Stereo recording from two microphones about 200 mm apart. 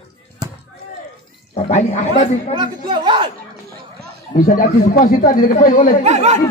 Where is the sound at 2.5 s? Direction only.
25° right (ahead or behind).